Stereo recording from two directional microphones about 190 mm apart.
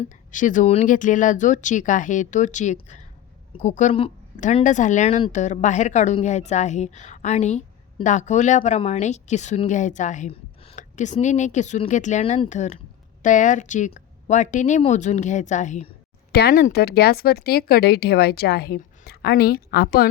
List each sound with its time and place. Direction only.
0.0 s a woman's voice: 40° left (ahead or behind)
16.3 s speech: 55° left (ahead or behind)